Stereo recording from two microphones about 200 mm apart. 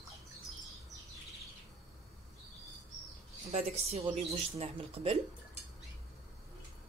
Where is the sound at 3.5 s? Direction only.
30° right (ahead or behind).